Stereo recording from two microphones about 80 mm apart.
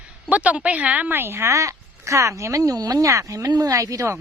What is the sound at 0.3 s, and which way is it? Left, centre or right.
Speech, centre.